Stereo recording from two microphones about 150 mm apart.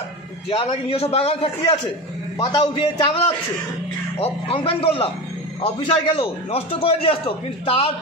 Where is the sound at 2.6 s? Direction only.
35° left (ahead or behind).